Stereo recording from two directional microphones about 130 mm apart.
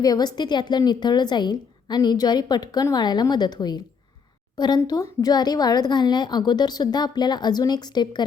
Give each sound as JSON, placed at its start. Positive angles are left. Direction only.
{"t": 0.0, "sound": "a woman's voice", "side_deg": 30}